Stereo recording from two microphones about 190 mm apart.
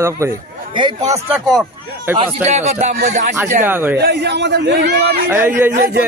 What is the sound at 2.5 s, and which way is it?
Speech, 35° right (ahead or behind).